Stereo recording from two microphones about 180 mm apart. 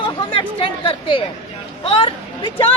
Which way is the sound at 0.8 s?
25° left (ahead or behind).